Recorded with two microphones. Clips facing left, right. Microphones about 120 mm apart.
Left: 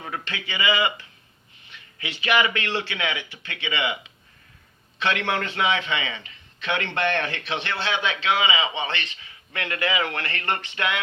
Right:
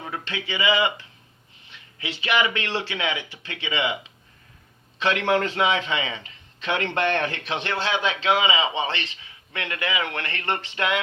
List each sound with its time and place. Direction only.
0.3 s a man's voice: 25° right (ahead or behind)
4.9 s a man's voice: 35° right (ahead or behind)
9.6 s speech: 15° right (ahead or behind); by 11.0 s 35° right (ahead or behind)